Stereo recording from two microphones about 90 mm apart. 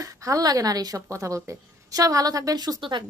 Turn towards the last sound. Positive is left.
turn(degrees=-60)  # may be behind; listen again after turning